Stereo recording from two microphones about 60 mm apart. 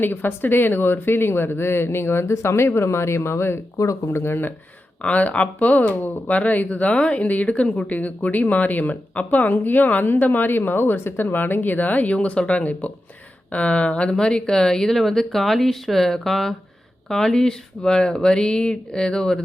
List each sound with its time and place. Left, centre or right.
0.0 s speech: left
3.8 s speech: left
4.2 s speech: left
5.0 s speech: left